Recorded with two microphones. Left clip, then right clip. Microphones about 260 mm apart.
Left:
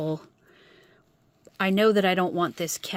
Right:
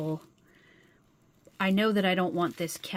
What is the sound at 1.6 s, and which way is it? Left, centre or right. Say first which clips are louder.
Speech: left 6 dB; left.